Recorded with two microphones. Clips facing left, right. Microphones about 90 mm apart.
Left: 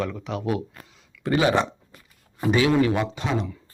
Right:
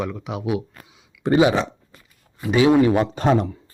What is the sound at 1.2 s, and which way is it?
Speech, 25° right (ahead or behind).